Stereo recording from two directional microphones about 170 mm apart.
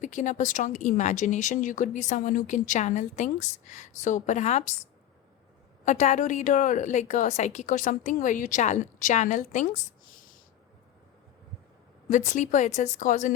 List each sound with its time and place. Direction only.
0.0 s speech: 45° left (ahead or behind)
5.8 s speech: 45° left (ahead or behind)
12.0 s speech: 50° left (ahead or behind)